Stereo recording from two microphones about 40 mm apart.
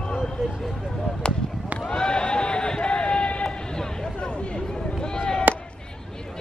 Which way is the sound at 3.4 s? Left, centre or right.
Centre.